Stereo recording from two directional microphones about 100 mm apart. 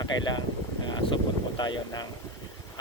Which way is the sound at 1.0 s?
65° left (ahead or behind).